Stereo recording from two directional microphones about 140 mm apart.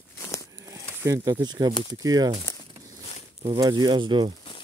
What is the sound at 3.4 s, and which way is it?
Speech, 30° right (ahead or behind).